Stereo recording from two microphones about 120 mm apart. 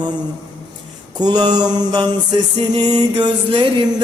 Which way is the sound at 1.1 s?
35° right (ahead or behind).